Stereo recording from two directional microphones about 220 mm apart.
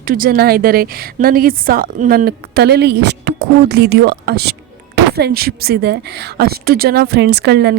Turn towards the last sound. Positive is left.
turn(degrees=-45)  # may be behind; listen again after turning